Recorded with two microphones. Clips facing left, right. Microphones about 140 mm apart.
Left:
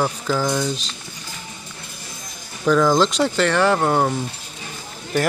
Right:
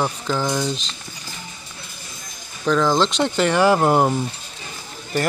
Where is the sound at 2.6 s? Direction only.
10° left (ahead or behind).